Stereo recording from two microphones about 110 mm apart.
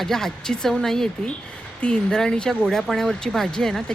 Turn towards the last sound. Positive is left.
turn(degrees=5)  # may be behind; listen again after turning